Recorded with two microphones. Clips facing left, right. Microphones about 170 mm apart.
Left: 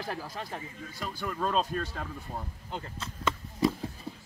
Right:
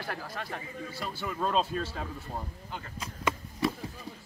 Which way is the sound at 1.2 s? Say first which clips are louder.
Even; 5° right (ahead or behind).